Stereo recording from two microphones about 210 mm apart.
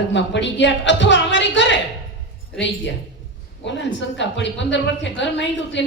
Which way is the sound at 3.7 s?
60° left (ahead or behind).